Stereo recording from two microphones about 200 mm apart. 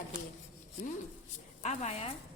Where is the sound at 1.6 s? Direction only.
35° left (ahead or behind).